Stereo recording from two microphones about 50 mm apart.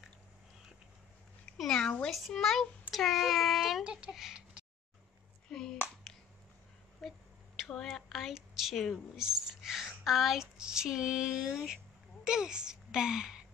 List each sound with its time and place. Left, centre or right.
1.6 s a child's voice: centre
2.9 s child singing: centre
3.8 s a child's voice: centre
4.1 s speech: centre
5.5 s speech: centre
7.0 s a sound: centre
7.7 s speech: centre